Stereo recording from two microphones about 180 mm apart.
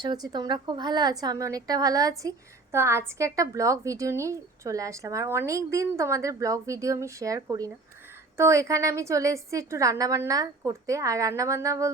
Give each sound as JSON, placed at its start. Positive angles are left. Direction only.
{"t": 0.0, "sound": "a woman's voice", "side_deg": -20}